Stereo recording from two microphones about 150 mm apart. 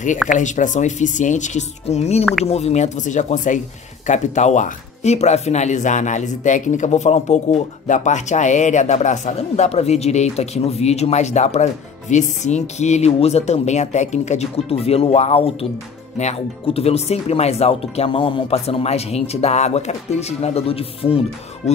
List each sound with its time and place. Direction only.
0.3 s speech: 55° left (ahead or behind); by 21.2 s 40° left (ahead or behind)